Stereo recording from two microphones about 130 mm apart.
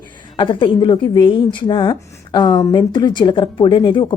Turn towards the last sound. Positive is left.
turn(degrees=35)  # may be behind; listen again after turning